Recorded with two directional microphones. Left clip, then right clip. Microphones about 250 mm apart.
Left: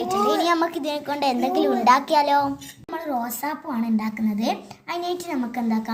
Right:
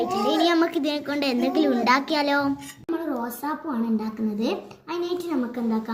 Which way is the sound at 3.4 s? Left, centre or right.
Left.